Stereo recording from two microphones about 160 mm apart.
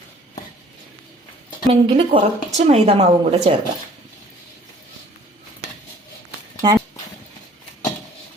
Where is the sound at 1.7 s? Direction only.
35° right (ahead or behind).